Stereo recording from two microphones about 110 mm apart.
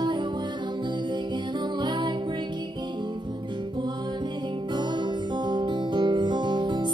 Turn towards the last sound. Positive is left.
turn(degrees=-45)  # may be behind; listen again after turning